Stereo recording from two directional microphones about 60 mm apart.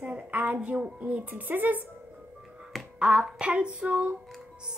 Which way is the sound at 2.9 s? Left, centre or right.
Centre.